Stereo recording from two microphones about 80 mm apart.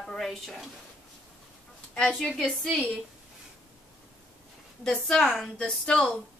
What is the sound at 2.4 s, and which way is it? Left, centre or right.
Speech, centre.